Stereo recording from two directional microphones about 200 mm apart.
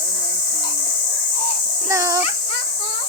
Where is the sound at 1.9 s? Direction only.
15° right (ahead or behind).